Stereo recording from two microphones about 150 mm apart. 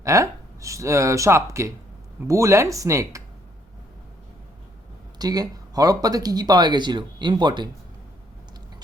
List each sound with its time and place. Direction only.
0.0 s speech: 20° right (ahead or behind)
5.2 s speech: 25° right (ahead or behind)